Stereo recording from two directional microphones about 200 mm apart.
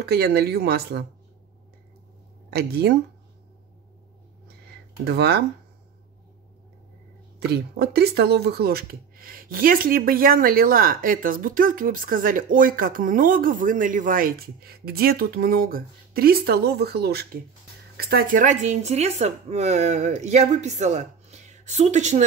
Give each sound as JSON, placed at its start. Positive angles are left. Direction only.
{"t": 0.0, "sound": "speech", "side_deg": -55}
{"t": 2.5, "sound": "speech", "side_deg": -55}
{"t": 5.0, "sound": "speech", "side_deg": -55}
{"t": 7.3, "sound": "speech", "side_deg": -55}